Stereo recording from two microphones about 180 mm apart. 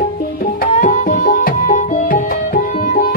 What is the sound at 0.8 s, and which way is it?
Music, 45° left (ahead or behind).